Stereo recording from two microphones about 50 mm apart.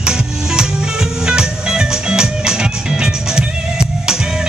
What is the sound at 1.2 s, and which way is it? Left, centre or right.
Music, centre.